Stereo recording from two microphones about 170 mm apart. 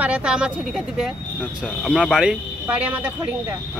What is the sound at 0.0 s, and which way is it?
Speech, 5° right (ahead or behind).